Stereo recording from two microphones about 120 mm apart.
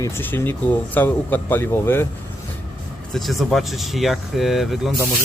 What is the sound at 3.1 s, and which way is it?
Speech, centre (ahead or behind).